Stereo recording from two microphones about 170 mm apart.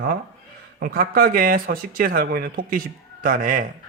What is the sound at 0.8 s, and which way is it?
Speech, 55° right (ahead or behind).